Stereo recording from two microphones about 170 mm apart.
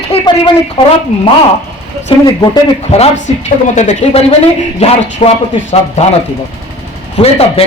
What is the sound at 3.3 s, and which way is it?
A man's voice, 35° left (ahead or behind).